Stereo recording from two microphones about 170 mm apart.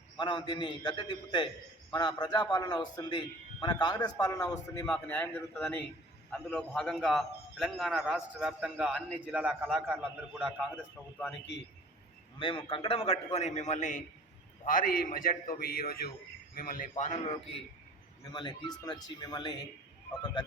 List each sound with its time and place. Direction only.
0.2 s a man's voice: 25° left (ahead or behind); by 9.2 s 5° left (ahead or behind)
9.3 s a man's voice: 5° right (ahead or behind)
12.4 s a man's voice: 30° left (ahead or behind); by 16.9 s 60° left (ahead or behind)
16.9 s a man's voice: 40° left (ahead or behind)
18.3 s a man's voice: 25° left (ahead or behind)